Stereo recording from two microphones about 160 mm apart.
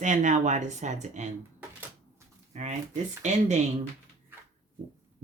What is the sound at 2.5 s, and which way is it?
Speech, 45° right (ahead or behind).